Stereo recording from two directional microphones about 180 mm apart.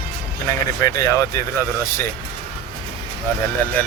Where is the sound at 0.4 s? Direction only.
20° left (ahead or behind).